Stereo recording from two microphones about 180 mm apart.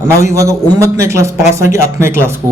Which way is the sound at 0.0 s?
15° right (ahead or behind).